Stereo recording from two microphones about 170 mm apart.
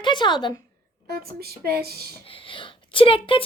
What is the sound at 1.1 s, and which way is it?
Speech, 65° right (ahead or behind).